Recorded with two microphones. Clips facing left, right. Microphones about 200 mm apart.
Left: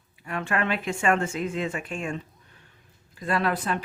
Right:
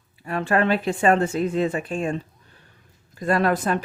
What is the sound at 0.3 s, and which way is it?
Speech, 35° right (ahead or behind).